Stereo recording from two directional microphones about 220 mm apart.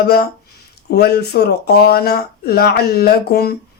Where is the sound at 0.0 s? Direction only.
45° left (ahead or behind).